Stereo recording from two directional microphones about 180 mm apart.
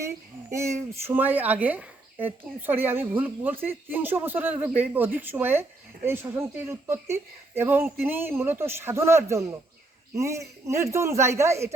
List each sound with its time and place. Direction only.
0.5 s a woman's voice: 15° right (ahead or behind)